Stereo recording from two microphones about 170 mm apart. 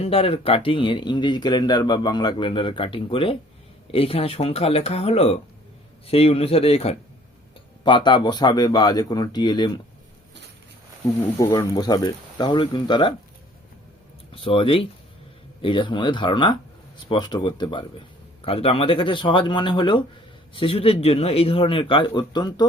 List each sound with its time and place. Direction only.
0.0 s speech: 35° left (ahead or behind)
11.3 s speech: 15° left (ahead or behind)
14.4 s speech: 30° left (ahead or behind)